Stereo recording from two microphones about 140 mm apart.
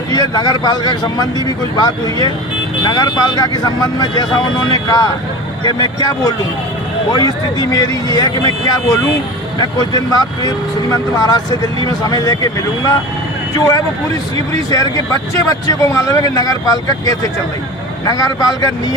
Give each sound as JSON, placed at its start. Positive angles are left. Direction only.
{"t": 0.1, "sound": "speech", "side_deg": 25}
{"t": 9.6, "sound": "speech", "side_deg": 30}
{"t": 14.5, "sound": "speech", "side_deg": 25}